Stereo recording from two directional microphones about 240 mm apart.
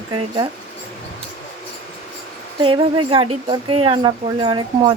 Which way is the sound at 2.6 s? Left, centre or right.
Right.